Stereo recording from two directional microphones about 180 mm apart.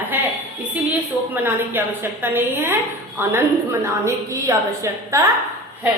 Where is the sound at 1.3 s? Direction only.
10° right (ahead or behind).